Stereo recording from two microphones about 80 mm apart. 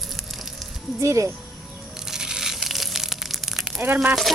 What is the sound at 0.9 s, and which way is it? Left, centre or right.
Speech, right.